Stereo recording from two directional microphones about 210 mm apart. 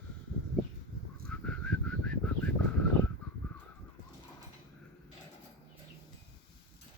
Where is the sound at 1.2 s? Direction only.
5° left (ahead or behind).